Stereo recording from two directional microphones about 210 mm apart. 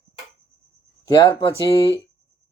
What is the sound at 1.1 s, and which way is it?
Speech, 15° left (ahead or behind).